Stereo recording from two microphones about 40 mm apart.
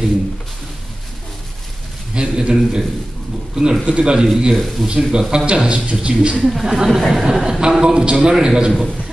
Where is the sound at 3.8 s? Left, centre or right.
Right.